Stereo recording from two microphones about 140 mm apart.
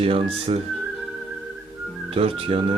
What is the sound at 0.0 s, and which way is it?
Speech, 45° right (ahead or behind).